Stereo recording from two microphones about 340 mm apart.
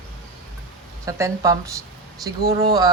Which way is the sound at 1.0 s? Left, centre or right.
Centre.